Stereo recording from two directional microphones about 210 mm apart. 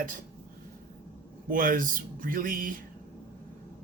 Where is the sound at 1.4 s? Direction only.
40° right (ahead or behind).